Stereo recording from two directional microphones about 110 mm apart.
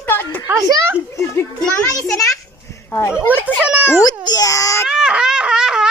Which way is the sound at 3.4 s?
10° right (ahead or behind).